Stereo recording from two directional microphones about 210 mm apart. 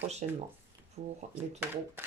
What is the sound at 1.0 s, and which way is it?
Speech, 30° right (ahead or behind).